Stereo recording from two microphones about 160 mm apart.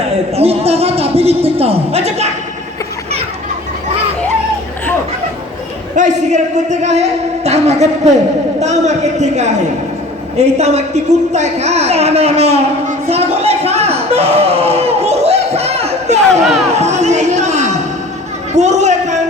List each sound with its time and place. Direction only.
0.3 s speech: 40° right (ahead or behind)
6.0 s a man's voice: 50° right (ahead or behind)
16.4 s speech: centre (ahead or behind)
16.7 s chatter: 45° right (ahead or behind)
18.5 s a sound: 45° right (ahead or behind)